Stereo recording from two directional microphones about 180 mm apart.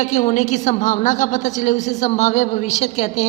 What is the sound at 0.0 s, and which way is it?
A woman's voice, 40° left (ahead or behind).